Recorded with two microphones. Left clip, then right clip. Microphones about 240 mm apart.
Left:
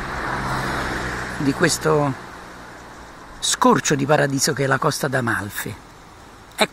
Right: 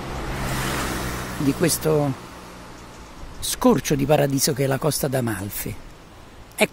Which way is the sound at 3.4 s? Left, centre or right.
Centre.